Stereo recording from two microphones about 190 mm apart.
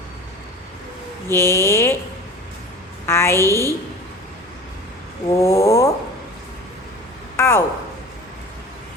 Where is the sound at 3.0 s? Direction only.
15° left (ahead or behind).